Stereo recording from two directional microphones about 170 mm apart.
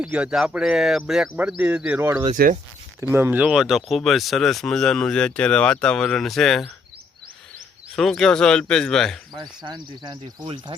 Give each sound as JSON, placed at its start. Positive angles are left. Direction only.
{"t": 0.0, "sound": "speech", "side_deg": -5}
{"t": 2.3, "sound": "speech", "side_deg": -50}
{"t": 3.0, "sound": "speech", "side_deg": -15}
{"t": 7.9, "sound": "speech", "side_deg": 0}
{"t": 9.3, "sound": "speech", "side_deg": -25}